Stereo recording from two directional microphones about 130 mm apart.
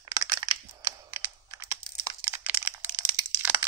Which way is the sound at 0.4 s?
20° right (ahead or behind).